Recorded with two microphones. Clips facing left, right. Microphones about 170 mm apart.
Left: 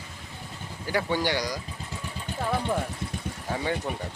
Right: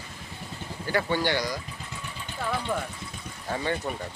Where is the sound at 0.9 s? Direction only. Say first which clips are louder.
Even; 10° left (ahead or behind).